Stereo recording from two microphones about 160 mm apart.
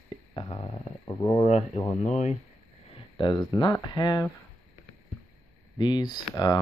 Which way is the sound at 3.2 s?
25° left (ahead or behind).